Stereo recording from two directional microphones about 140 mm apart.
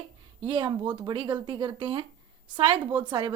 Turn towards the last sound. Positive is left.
turn(degrees=-35)  # may be behind; listen again after turning